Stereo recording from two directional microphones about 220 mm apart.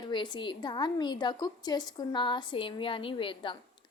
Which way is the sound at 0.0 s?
20° left (ahead or behind).